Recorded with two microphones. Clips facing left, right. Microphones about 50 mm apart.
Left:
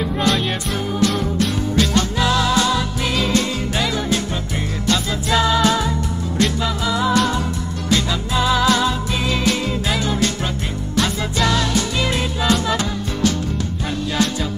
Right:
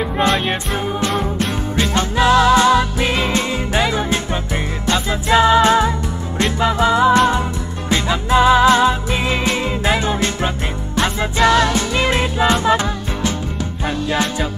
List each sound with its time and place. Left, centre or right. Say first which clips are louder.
0.0 s music: right 2 dB; right